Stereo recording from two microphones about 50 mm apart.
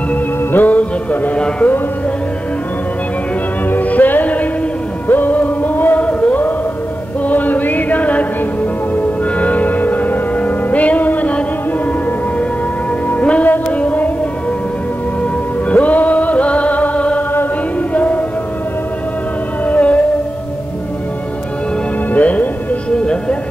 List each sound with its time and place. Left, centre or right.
0.1 s music: left
3.7 s music: left
5.9 s music: left
7.2 s chant: left
8.9 s music: left
13.2 s music: left
13.7 s a sound: left
15.7 s music: left
19.6 s whale vocalization: left
22.1 s music: left
22.8 s music: centre